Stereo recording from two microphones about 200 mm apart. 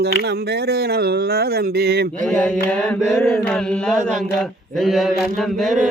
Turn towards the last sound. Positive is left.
turn(degrees=0)  # may be behind; listen again after turning